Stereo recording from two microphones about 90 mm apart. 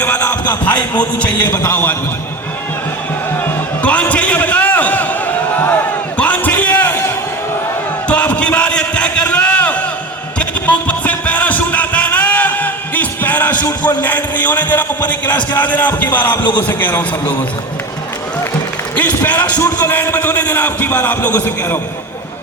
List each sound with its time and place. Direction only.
0.0 s a man's voice: 20° left (ahead or behind)
3.8 s a sound: 15° left (ahead or behind)
8.0 s a sound: 15° left (ahead or behind)
10.3 s music: 15° left (ahead or behind)
13.8 s a man's voice: 20° left (ahead or behind)
18.9 s a man's voice: 15° left (ahead or behind)